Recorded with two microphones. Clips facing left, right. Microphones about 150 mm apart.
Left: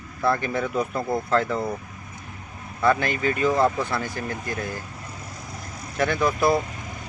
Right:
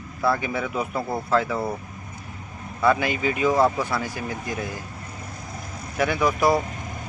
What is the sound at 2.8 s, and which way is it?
Speech, 10° right (ahead or behind).